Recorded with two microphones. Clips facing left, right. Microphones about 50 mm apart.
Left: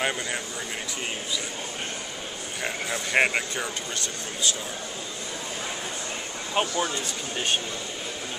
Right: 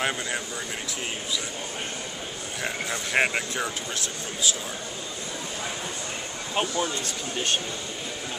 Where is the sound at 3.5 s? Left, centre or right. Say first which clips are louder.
Right 1 dB; centre.